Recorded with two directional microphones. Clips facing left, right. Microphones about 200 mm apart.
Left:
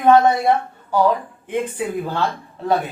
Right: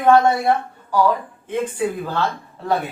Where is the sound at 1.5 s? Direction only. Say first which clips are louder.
Right 1 dB; 20° left (ahead or behind).